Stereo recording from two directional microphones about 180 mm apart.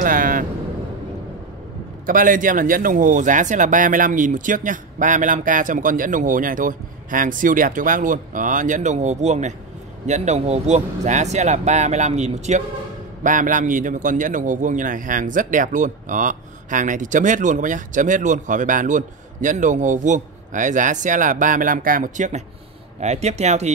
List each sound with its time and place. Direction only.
0.0 s vehicle: 50° right (ahead or behind)
2.0 s a man's voice: 50° right (ahead or behind)